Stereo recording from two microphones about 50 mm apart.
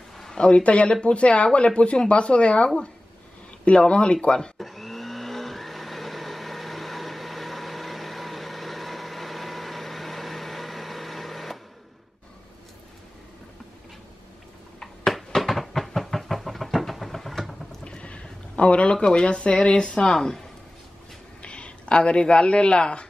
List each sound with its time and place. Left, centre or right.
0.2 s speech: centre
4.6 s blender: centre
14.8 s a sound: centre
17.8 s speech: left
21.4 s speech: left